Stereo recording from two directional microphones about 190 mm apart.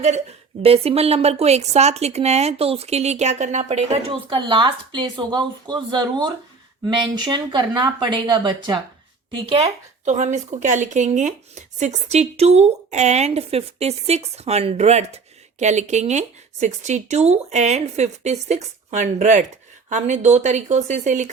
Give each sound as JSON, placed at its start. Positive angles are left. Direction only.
{"t": 0.0, "sound": "speech", "side_deg": -35}